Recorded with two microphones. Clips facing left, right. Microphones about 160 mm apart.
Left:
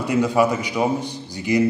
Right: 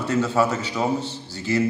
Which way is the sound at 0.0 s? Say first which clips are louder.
Left 3 dB; 15° left (ahead or behind).